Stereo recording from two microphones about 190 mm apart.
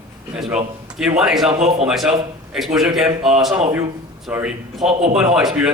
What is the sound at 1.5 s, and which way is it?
Speech, 30° right (ahead or behind).